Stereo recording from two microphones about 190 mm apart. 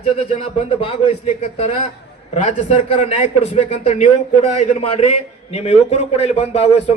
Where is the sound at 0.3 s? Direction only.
30° left (ahead or behind).